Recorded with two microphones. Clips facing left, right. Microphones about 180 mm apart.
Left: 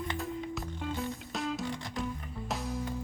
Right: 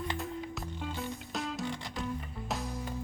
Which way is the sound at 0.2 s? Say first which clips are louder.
Left 2 dB; centre (ahead or behind).